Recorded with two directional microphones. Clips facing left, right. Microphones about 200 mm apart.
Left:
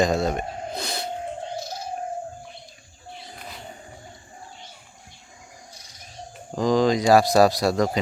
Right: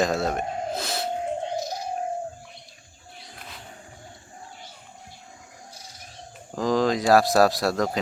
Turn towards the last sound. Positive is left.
turn(degrees=0)  # may be behind; listen again after turning